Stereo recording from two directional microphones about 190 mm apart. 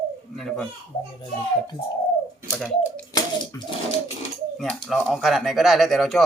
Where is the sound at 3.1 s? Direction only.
20° left (ahead or behind).